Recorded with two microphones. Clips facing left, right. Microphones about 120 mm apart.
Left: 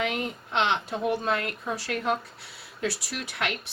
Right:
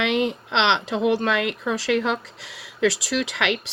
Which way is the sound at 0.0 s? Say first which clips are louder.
Right 7 dB; 85° right.